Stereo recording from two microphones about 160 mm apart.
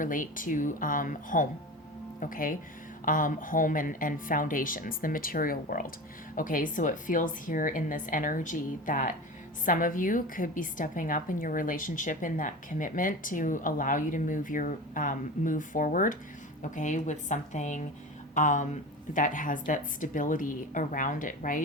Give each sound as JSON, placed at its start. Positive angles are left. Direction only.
{"t": 0.0, "sound": "a woman's voice", "side_deg": 55}